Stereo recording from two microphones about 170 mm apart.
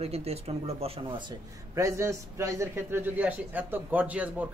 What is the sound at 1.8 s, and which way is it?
A man's voice, 15° right (ahead or behind).